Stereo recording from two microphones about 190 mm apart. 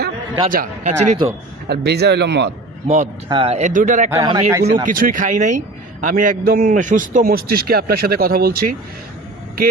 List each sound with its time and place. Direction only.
0.4 s speech: 45° right (ahead or behind)
1.6 s speech: 60° right (ahead or behind)
2.8 s speech: 35° right (ahead or behind)
4.1 s speech: 15° right (ahead or behind)
4.9 s a man's voice: 45° right (ahead or behind)